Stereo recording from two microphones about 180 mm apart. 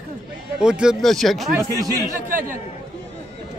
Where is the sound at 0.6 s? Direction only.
5° right (ahead or behind).